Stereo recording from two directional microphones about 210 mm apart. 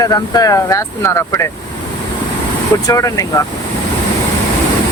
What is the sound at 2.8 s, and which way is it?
Speech, 15° left (ahead or behind).